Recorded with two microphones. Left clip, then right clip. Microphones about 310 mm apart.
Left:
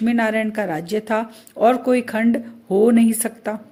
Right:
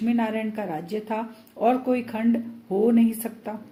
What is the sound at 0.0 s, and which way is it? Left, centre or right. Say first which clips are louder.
A woman's voice: left 7 dB; left.